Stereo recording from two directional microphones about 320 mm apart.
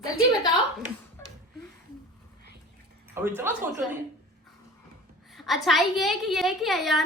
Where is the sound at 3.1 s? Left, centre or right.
Centre.